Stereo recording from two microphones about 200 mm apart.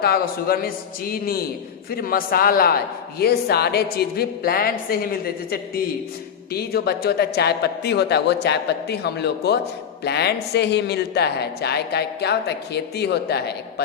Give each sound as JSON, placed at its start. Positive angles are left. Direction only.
{"t": 0.0, "sound": "a man's voice", "side_deg": 50}